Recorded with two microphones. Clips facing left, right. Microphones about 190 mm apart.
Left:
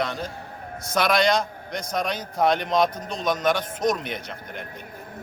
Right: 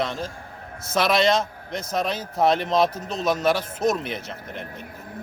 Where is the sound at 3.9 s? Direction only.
30° right (ahead or behind).